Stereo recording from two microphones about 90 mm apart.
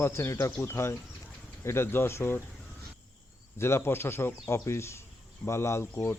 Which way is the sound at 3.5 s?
30° left (ahead or behind).